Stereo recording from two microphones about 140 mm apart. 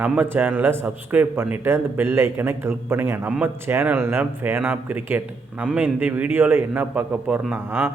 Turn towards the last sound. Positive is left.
turn(degrees=-15)  # may be behind; listen again after turning